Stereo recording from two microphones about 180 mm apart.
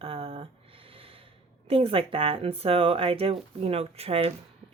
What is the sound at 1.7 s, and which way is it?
Speech, 30° right (ahead or behind).